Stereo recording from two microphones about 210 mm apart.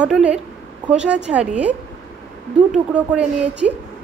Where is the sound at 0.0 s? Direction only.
5° right (ahead or behind).